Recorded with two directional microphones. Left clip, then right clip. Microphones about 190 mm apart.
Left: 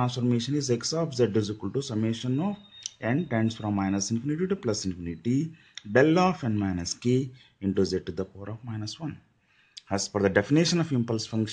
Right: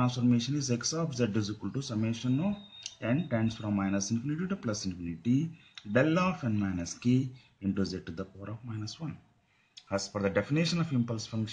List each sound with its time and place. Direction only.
0.0 s speech: 40° left (ahead or behind)